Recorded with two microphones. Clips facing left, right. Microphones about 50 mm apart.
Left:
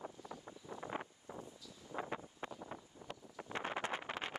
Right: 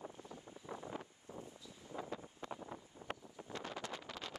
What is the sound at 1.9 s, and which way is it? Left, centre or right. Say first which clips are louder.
Wind noise: left 3 dB; left.